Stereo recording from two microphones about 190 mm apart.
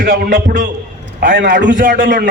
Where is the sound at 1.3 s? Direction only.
65° right (ahead or behind).